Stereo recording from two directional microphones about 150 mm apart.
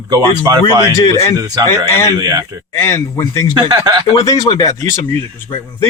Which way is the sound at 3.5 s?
25° right (ahead or behind).